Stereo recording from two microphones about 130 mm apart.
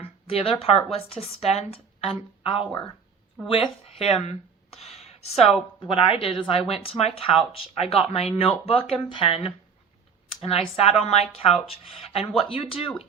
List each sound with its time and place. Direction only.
0.0 s speech: 50° left (ahead or behind)